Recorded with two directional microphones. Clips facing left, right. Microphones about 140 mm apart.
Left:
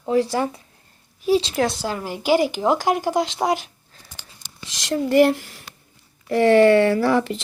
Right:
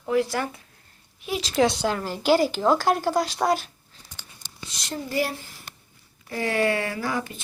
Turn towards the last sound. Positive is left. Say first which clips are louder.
# left 10 dB
turn(degrees=70)  # may be behind; listen again after turning